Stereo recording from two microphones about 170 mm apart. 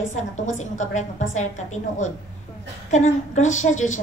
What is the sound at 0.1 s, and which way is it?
A woman's voice, 45° left (ahead or behind).